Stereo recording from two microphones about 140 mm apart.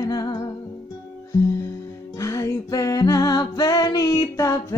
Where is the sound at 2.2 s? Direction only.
20° left (ahead or behind).